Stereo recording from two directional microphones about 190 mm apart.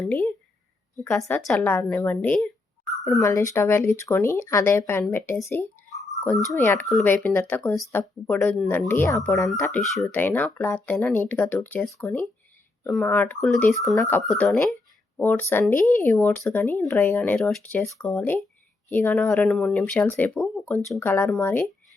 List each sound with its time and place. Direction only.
0.0 s speech: 10° left (ahead or behind)
1.4 s speech: 5° left (ahead or behind)
3.2 s speech: 15° left (ahead or behind)
9.8 s speech: centre (ahead or behind)
14.0 s speech: 15° left (ahead or behind)